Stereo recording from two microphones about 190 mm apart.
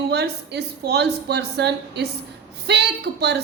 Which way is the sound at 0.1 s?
60° right (ahead or behind).